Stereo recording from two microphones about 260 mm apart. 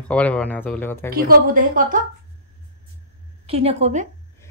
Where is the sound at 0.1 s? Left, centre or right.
Centre.